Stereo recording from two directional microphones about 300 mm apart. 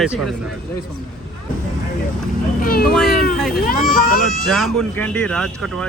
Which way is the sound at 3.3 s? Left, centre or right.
Centre.